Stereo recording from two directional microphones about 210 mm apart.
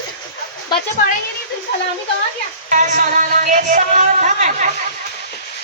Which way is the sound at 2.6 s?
40° right (ahead or behind).